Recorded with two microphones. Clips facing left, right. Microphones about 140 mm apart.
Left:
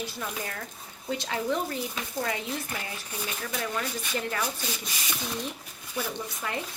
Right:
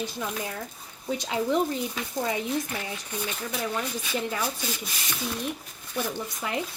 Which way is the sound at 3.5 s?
10° right (ahead or behind).